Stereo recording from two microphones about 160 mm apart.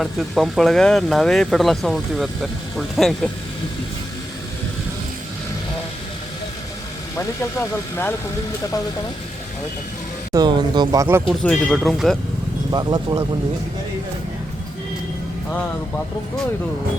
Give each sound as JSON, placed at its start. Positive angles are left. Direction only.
{"t": 0.0, "sound": "speech", "side_deg": 0}
{"t": 7.2, "sound": "speech", "side_deg": 15}
{"t": 10.3, "sound": "speech", "side_deg": -25}
{"t": 11.3, "sound": "speech", "side_deg": 0}
{"t": 12.7, "sound": "speech", "side_deg": -25}